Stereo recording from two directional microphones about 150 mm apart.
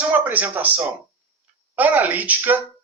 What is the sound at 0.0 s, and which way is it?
Speech, 10° right (ahead or behind).